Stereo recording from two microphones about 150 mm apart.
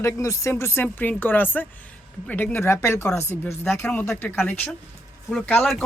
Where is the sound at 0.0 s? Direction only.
20° left (ahead or behind).